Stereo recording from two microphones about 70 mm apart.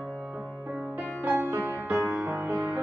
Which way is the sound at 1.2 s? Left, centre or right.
Right.